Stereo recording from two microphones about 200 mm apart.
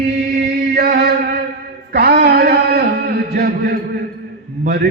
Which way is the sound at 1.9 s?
50° right (ahead or behind).